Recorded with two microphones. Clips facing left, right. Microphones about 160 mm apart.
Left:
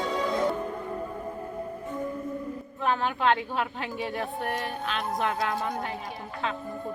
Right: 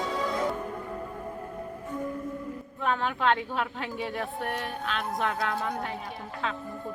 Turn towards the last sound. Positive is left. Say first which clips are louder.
# left 1 dB
turn(degrees=5)  # may be behind; listen again after turning